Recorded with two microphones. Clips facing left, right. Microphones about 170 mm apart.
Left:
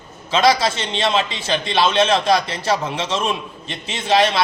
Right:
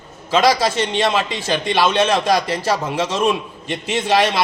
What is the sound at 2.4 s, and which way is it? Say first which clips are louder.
Speech: right 1 dB; 40° right (ahead or behind).